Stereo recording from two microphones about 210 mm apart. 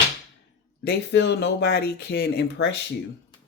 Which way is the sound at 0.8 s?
55° left (ahead or behind).